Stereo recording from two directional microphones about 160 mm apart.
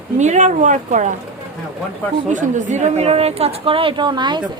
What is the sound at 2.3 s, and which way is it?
A woman's voice, 50° right (ahead or behind).